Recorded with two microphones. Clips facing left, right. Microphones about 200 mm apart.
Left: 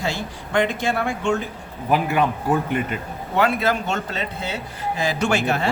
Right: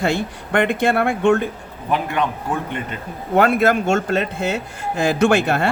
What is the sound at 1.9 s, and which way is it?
Speech, 5° left (ahead or behind).